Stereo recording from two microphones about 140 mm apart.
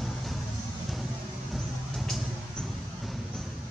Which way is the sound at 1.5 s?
Centre (ahead or behind).